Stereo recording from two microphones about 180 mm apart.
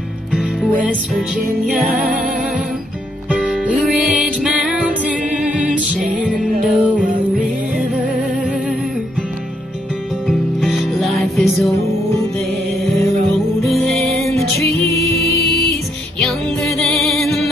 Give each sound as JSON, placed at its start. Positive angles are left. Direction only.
{"t": 0.3, "sound": "music", "side_deg": 0}
{"t": 3.3, "sound": "music", "side_deg": 0}
{"t": 10.2, "sound": "music", "side_deg": 0}
{"t": 13.7, "sound": "music", "side_deg": 0}
{"t": 15.4, "sound": "music", "side_deg": 60}
{"t": 16.2, "sound": "music", "side_deg": 0}